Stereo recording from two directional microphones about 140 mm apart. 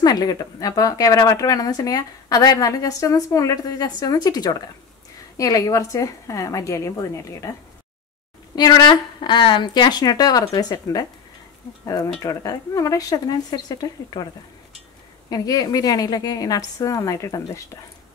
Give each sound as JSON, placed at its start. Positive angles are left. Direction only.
{"t": 0.0, "sound": "speech", "side_deg": 25}
{"t": 8.5, "sound": "speech", "side_deg": 30}
{"t": 15.2, "sound": "speech", "side_deg": 25}